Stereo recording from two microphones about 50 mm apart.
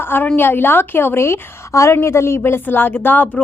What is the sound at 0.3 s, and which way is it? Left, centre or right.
A woman's voice, left.